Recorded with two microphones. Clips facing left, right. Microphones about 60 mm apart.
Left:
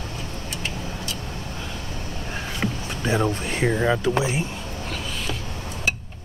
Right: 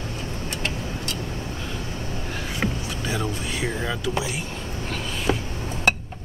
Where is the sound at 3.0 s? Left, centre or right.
Left.